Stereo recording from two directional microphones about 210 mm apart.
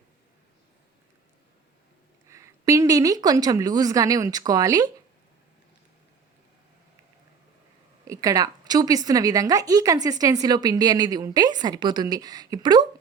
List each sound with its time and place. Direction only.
2.2 s a woman's voice: 15° right (ahead or behind)
8.0 s a woman's voice: 15° right (ahead or behind)